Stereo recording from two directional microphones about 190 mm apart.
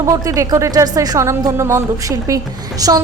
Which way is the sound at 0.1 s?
15° right (ahead or behind).